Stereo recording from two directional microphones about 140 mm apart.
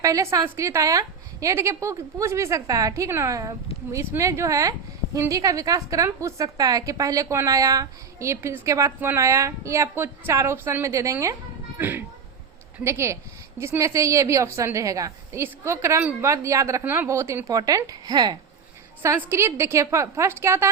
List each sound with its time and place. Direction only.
0.0 s a woman's voice: 25° right (ahead or behind)
19.0 s a woman's voice: 15° right (ahead or behind)